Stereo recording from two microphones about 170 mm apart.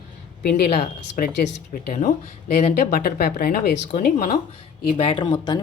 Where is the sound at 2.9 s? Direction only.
60° left (ahead or behind).